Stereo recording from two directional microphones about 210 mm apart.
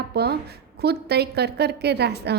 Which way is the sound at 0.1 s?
50° right (ahead or behind).